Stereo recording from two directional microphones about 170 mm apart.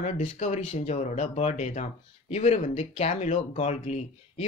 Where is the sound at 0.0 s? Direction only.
45° left (ahead or behind).